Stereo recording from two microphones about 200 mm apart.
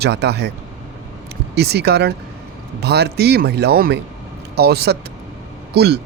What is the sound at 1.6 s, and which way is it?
Speech, 55° right (ahead or behind).